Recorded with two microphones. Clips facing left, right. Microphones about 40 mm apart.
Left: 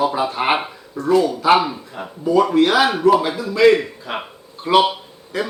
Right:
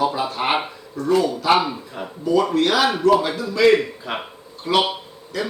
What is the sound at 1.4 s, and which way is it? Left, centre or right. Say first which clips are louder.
Speech: left 3 dB; centre.